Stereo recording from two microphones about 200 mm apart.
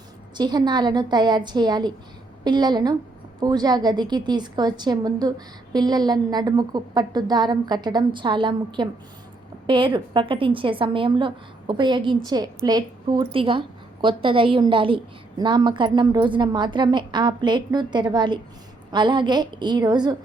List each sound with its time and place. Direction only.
0.3 s a woman's voice: 20° right (ahead or behind)